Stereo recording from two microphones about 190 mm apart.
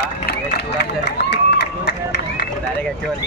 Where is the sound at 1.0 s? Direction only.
60° left (ahead or behind).